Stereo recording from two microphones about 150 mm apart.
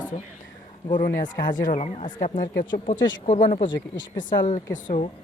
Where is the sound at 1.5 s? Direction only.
55° left (ahead or behind).